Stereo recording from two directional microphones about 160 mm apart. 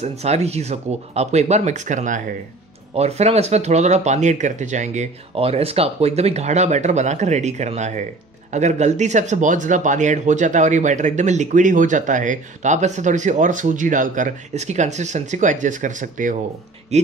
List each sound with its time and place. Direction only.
0.0 s speech: 40° right (ahead or behind)
16.9 s speech: 45° right (ahead or behind)